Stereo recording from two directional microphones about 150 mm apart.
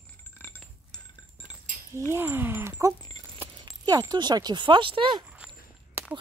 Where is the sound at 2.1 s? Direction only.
15° right (ahead or behind); by 5.1 s 35° right (ahead or behind).